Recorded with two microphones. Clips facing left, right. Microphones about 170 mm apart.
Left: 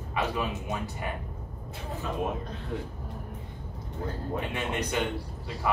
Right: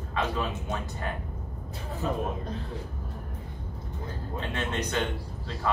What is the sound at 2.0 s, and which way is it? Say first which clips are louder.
Speech: right 5 dB; 35° right (ahead or behind).